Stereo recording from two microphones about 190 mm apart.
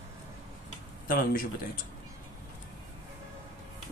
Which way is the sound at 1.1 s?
50° left (ahead or behind).